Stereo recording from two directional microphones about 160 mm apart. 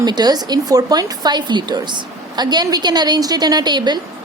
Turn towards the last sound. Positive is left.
turn(degrees=-25)  # may be behind; listen again after turning